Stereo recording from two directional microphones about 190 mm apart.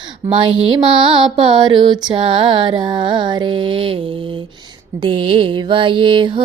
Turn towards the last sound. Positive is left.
turn(degrees=-25)  # may be behind; listen again after turning